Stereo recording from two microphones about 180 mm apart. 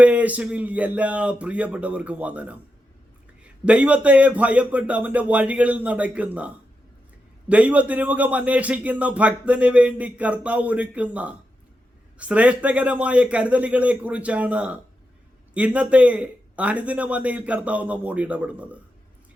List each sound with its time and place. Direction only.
0.0 s a man's voice: 5° right (ahead or behind)